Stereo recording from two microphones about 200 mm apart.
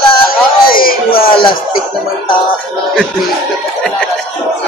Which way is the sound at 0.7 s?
45° left (ahead or behind).